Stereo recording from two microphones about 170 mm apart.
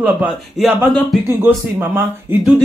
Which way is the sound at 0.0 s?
10° right (ahead or behind).